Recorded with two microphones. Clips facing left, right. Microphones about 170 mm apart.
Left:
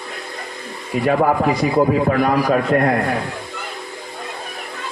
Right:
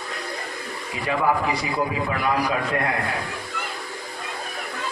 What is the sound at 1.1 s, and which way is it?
A man's voice, 45° left (ahead or behind).